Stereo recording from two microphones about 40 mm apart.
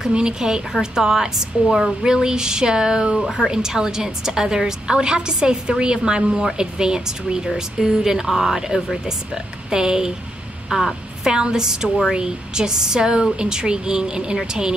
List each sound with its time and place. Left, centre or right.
0.1 s speech: centre
3.2 s speech: centre
3.4 s a woman's voice: centre